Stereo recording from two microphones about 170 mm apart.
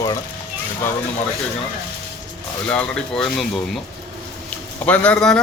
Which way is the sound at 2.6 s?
5° left (ahead or behind).